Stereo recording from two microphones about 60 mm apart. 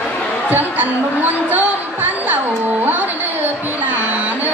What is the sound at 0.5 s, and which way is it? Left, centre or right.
Speech, right.